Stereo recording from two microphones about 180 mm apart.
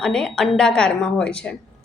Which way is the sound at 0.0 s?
5° left (ahead or behind).